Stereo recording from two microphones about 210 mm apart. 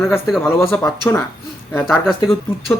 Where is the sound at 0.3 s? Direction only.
Centre (ahead or behind).